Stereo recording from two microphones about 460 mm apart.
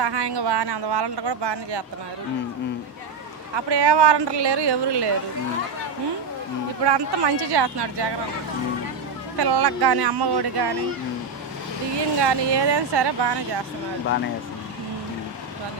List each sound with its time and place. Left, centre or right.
0.0 s speech: right
3.5 s speech: right
6.8 s speech: right
9.4 s speech: right
12.1 s speech: right